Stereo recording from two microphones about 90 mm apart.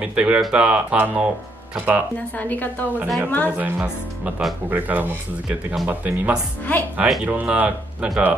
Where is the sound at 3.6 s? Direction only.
15° right (ahead or behind).